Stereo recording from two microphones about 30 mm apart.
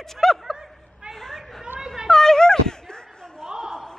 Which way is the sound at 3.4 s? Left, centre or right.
Right.